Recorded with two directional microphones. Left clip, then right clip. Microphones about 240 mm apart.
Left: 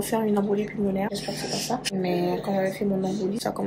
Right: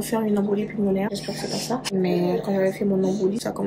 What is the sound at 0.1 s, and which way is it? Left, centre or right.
Speech, centre.